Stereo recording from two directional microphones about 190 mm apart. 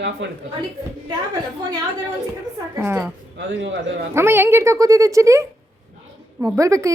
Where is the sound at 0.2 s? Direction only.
70° right (ahead or behind).